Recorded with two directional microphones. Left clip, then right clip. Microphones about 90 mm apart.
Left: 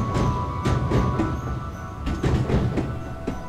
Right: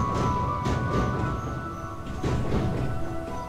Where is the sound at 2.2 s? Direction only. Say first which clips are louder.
Left 4 dB; 30° left (ahead or behind).